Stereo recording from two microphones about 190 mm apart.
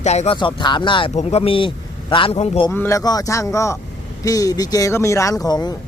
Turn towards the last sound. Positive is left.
turn(degrees=20)  # may be behind; listen again after turning